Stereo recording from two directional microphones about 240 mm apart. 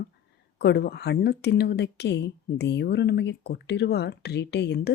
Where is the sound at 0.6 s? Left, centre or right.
Left.